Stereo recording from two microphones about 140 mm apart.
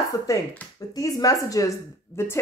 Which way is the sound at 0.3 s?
20° left (ahead or behind).